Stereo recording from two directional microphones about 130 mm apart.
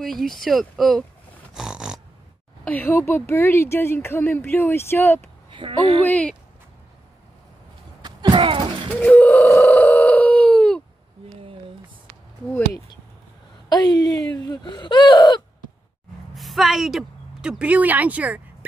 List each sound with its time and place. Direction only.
0.0 s speech: centre (ahead or behind)
1.5 s snort: 5° right (ahead or behind)
2.6 s speech: 15° left (ahead or behind)
5.5 s a woman's voice: 40° right (ahead or behind)
6.0 s speech: 10° left (ahead or behind)
8.0 s a sound: 35° right (ahead or behind)
8.9 s a sound: 10° left (ahead or behind)
9.5 s telephone bell ringing: 15° left (ahead or behind)
13.7 s a sound: 30° left (ahead or behind)
16.3 s speech: centre (ahead or behind)